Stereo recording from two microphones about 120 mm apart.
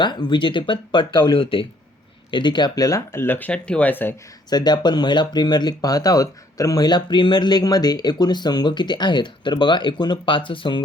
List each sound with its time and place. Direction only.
0.0 s speech: 40° left (ahead or behind); by 4.1 s 15° left (ahead or behind)
4.4 s speech: 35° left (ahead or behind)